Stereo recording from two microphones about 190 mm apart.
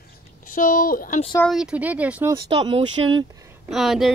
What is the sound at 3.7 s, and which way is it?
Speech, centre (ahead or behind).